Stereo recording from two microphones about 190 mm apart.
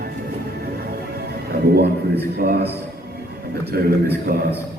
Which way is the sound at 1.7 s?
60° right (ahead or behind).